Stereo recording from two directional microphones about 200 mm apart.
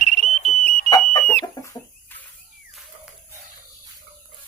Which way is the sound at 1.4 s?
15° left (ahead or behind).